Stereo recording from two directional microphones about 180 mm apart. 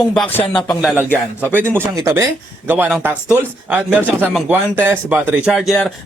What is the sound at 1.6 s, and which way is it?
Speech, 15° right (ahead or behind).